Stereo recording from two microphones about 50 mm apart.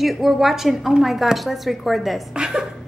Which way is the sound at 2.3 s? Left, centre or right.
Centre.